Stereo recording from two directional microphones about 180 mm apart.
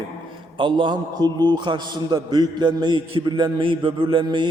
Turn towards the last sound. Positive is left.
turn(degrees=-25)  # may be behind; listen again after turning